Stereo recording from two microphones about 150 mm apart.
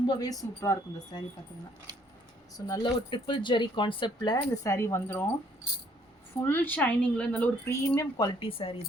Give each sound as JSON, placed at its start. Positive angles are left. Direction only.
{"t": 0.1, "sound": "speech", "side_deg": 25}
{"t": 2.6, "sound": "speech", "side_deg": 25}
{"t": 4.4, "sound": "speech", "side_deg": 20}
{"t": 6.4, "sound": "speech", "side_deg": 15}